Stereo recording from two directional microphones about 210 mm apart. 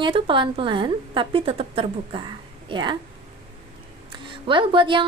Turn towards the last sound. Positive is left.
turn(degrees=-25)  # may be behind; listen again after turning